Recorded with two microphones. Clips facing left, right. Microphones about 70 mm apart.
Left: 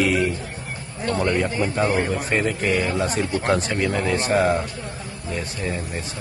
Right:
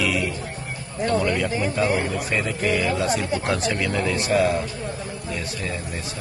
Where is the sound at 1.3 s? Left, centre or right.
Left.